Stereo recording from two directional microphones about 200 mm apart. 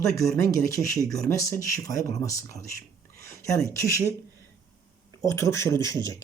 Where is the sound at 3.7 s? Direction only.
15° left (ahead or behind).